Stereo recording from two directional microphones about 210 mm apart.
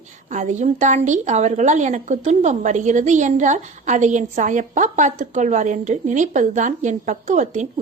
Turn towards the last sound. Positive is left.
turn(degrees=-35)  # may be behind; listen again after turning